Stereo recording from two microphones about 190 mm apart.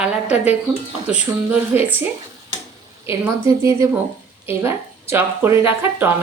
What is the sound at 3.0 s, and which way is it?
Speech, 15° right (ahead or behind).